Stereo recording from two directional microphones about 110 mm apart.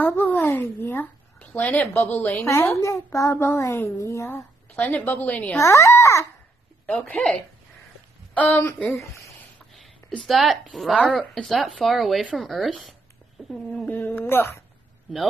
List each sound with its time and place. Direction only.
0.0 s speech: 20° left (ahead or behind)
2.4 s a woman's voice: 25° left (ahead or behind)
4.7 s a woman's voice: 15° left (ahead or behind)
5.6 s a woman's voice: 25° left (ahead or behind)
6.9 s a woman's voice: 10° left (ahead or behind)
8.4 s a woman's voice: 15° left (ahead or behind)
9.7 s speech: centre (ahead or behind)
13.8 s a woman's voice: 15° left (ahead or behind)